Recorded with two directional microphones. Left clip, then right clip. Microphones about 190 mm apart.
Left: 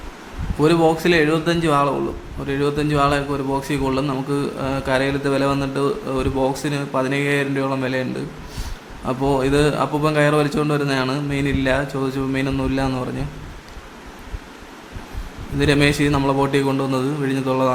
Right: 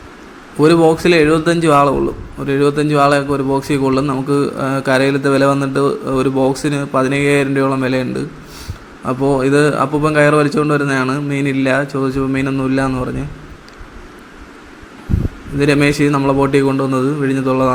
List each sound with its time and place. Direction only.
0.6 s a man's voice: 15° right (ahead or behind)
15.5 s a man's voice: 10° right (ahead or behind)